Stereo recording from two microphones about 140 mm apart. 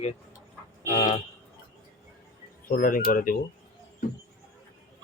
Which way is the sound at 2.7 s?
80° left.